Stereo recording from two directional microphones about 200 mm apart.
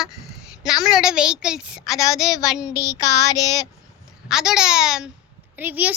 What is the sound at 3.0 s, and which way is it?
Child singing, 20° left (ahead or behind).